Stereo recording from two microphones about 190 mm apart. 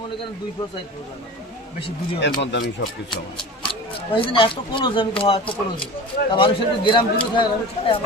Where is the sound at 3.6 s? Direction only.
25° left (ahead or behind).